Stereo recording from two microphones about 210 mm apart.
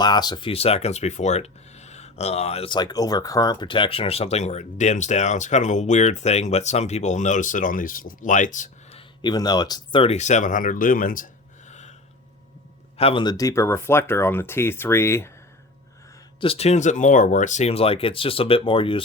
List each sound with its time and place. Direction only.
0.0 s speech: 20° left (ahead or behind); by 11.3 s 40° left (ahead or behind)
11.7 s a sound: 35° left (ahead or behind)
13.0 s speech: 25° left (ahead or behind)
16.4 s speech: 30° left (ahead or behind)